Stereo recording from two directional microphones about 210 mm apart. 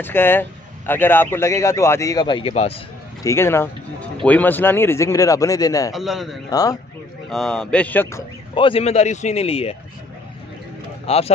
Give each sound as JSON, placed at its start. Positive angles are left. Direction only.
{"t": 0.0, "sound": "a man's voice", "side_deg": 10}
{"t": 3.3, "sound": "a man's voice", "side_deg": 10}
{"t": 5.9, "sound": "speech", "side_deg": 0}
{"t": 6.5, "sound": "a man's voice", "side_deg": 15}
{"t": 7.2, "sound": "speech", "side_deg": 0}
{"t": 8.5, "sound": "a man's voice", "side_deg": 25}
{"t": 11.1, "sound": "a man's voice", "side_deg": 30}